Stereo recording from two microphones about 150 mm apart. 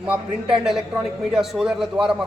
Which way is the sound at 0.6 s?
5° right (ahead or behind).